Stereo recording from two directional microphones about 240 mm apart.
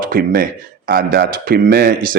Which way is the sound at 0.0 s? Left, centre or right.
Right.